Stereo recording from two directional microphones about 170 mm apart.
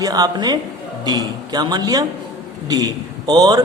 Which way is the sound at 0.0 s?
20° right (ahead or behind).